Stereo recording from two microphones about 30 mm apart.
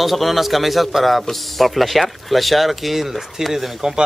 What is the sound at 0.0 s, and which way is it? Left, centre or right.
A man's voice, centre.